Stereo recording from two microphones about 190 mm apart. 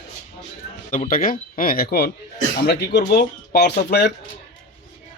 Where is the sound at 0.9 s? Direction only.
45° left (ahead or behind); by 4.1 s 60° left (ahead or behind).